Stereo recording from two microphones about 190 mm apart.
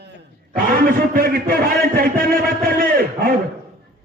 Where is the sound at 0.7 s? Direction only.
50° right (ahead or behind).